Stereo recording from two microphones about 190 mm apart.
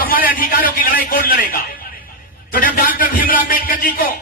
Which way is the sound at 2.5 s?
45° left (ahead or behind).